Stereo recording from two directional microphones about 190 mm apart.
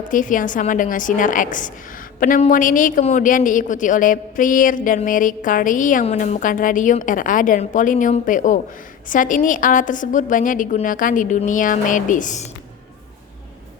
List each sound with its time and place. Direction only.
0.1 s a woman's voice: 45° left (ahead or behind)